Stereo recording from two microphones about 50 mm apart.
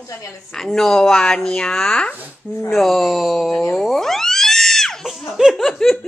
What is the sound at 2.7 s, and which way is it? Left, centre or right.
Speech, centre.